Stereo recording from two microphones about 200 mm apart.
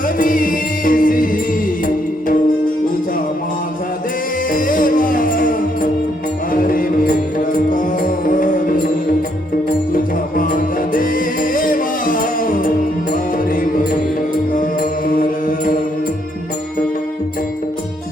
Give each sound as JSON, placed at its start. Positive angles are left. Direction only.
{"t": 0.2, "sound": "music", "side_deg": 45}
{"t": 4.5, "sound": "music", "side_deg": 45}
{"t": 14.5, "sound": "music", "side_deg": 45}